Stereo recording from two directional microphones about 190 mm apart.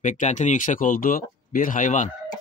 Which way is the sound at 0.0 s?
40° left (ahead or behind).